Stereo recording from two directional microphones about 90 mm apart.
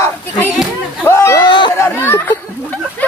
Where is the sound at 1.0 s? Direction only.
30° left (ahead or behind).